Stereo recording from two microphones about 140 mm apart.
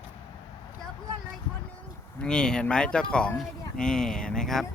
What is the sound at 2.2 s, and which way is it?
Speech, 5° left (ahead or behind).